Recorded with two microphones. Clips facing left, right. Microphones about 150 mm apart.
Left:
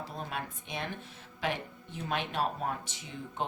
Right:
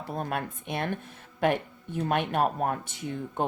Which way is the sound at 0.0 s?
55° right (ahead or behind).